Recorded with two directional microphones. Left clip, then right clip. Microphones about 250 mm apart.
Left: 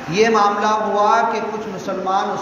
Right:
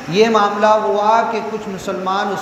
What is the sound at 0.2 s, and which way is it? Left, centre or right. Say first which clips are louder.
A man's voice: right 2 dB; right.